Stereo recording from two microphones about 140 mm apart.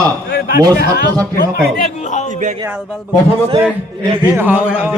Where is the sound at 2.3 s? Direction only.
60° right (ahead or behind).